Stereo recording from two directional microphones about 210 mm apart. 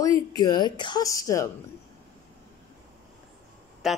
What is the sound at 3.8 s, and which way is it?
Speech, centre (ahead or behind).